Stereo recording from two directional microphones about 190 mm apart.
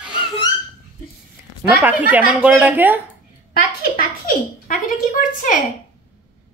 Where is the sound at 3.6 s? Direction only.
50° left (ahead or behind).